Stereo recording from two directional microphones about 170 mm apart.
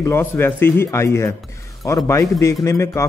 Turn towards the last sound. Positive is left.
turn(degrees=15)  # may be behind; listen again after turning